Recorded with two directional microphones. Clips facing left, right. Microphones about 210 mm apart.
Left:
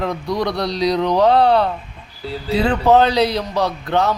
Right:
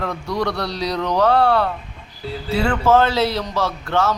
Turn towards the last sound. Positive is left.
turn(degrees=15)  # may be behind; listen again after turning